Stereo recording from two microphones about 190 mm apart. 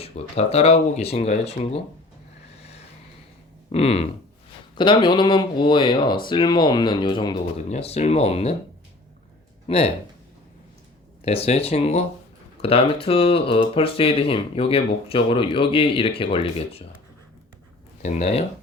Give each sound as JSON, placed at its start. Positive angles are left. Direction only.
{"t": 0.0, "sound": "speech", "side_deg": 35}
{"t": 2.6, "sound": "vehicle", "side_deg": 35}
{"t": 3.7, "sound": "speech", "side_deg": 30}
{"t": 9.6, "sound": "speech", "side_deg": 30}
{"t": 11.2, "sound": "speech", "side_deg": 30}
{"t": 18.0, "sound": "speech", "side_deg": 35}